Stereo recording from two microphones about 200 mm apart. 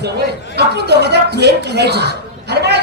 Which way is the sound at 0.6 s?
55° right (ahead or behind).